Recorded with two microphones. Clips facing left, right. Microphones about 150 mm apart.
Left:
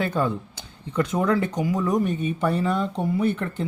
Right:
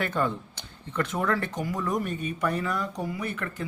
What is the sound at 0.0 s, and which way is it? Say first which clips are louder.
Speech: left 3 dB; 15° left (ahead or behind).